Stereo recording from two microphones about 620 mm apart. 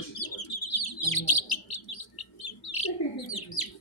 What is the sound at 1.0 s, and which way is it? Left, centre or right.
Bird, left.